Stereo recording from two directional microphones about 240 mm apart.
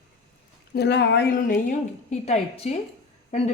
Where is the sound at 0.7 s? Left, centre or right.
Left.